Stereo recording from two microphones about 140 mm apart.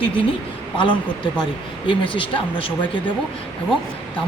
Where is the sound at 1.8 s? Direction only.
35° left (ahead or behind).